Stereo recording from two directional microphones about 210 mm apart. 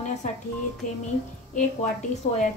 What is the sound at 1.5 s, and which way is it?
Speech, 35° left (ahead or behind).